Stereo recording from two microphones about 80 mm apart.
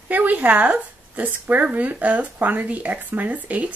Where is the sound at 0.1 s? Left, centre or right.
Right.